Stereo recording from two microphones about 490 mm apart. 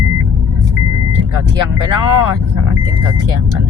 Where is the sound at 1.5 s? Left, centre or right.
Right.